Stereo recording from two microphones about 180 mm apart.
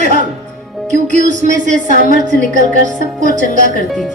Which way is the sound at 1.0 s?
40° right (ahead or behind).